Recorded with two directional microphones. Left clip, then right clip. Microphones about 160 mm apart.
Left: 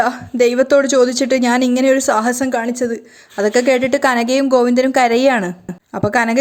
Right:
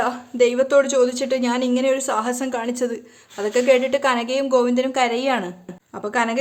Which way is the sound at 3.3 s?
35° left (ahead or behind).